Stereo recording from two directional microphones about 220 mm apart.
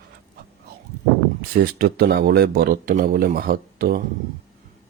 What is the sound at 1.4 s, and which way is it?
Speech, 45° right (ahead or behind).